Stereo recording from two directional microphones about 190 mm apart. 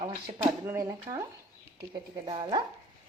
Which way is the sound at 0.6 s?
15° right (ahead or behind).